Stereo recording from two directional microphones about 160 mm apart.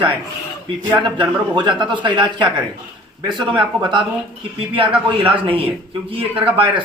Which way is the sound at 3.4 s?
5° right (ahead or behind).